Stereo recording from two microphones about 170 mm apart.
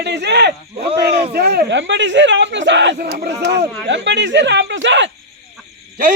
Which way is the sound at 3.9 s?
90° right.